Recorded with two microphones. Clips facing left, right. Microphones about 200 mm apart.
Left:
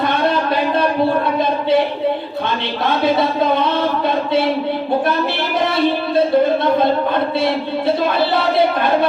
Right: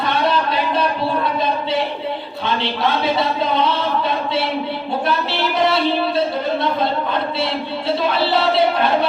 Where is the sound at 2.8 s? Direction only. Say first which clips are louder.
Left 4 dB; 55° left (ahead or behind).